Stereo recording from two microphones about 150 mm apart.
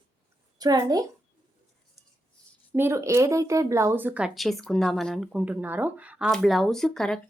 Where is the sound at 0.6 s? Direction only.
25° right (ahead or behind).